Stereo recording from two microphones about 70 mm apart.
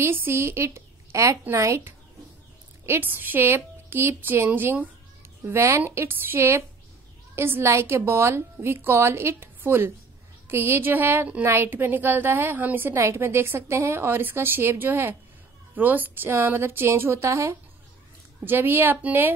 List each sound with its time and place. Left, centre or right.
0.0 s a woman's voice: right
2.8 s a woman's voice: right
5.4 s a woman's voice: right
18.4 s a woman's voice: right